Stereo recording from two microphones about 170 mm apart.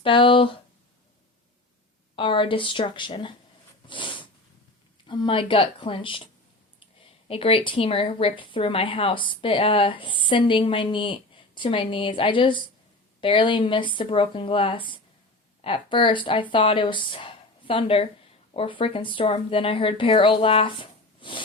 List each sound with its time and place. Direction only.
0.0 s speech: 30° left (ahead or behind)
2.1 s speech: 30° left (ahead or behind)
3.8 s snort: 30° left (ahead or behind)
5.0 s speech: 30° left (ahead or behind)